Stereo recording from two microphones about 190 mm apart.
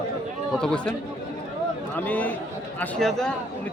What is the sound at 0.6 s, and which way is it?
Speech, 5° left (ahead or behind).